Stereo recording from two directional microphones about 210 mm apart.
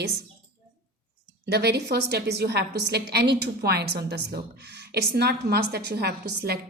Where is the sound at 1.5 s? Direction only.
50° right (ahead or behind).